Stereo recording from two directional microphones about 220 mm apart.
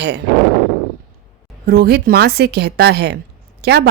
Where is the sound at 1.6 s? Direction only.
45° right (ahead or behind).